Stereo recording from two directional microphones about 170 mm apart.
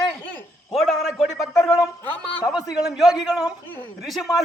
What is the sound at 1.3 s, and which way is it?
Speech, 20° left (ahead or behind).